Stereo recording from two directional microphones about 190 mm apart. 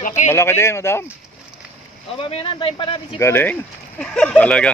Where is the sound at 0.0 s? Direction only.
40° left (ahead or behind).